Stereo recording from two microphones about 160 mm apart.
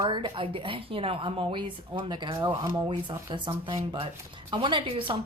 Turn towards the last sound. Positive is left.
turn(degrees=-30)  # may be behind; listen again after turning